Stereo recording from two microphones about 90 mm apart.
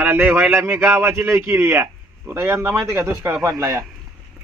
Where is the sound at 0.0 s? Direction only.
20° right (ahead or behind).